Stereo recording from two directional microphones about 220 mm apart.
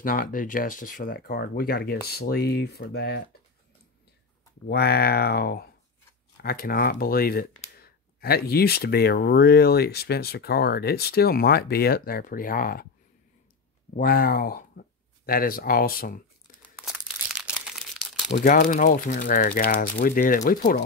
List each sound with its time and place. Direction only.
0.0 s speech: 40° left (ahead or behind)
4.6 s speech: 45° left (ahead or behind)
13.9 s speech: 40° left (ahead or behind)
16.6 s crumpling: centre (ahead or behind)
18.3 s speech: 35° left (ahead or behind)